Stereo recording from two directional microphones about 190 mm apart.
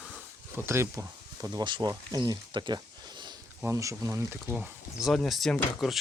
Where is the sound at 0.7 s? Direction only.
15° right (ahead or behind).